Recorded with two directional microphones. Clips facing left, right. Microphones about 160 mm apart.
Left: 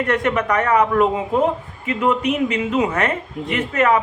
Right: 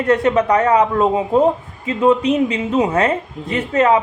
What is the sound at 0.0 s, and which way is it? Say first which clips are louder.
Speech: right 5 dB; 30° right (ahead or behind).